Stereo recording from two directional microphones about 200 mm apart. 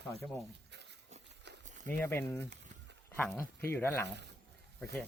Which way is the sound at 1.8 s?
10° left (ahead or behind).